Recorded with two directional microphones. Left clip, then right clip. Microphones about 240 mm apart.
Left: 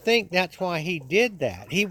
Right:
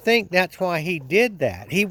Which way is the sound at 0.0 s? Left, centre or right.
Right.